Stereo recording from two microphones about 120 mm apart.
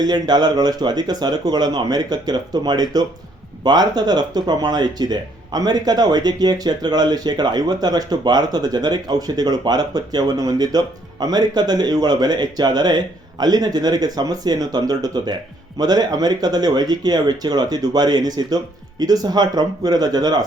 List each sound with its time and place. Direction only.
0.0 s speech: 35° right (ahead or behind)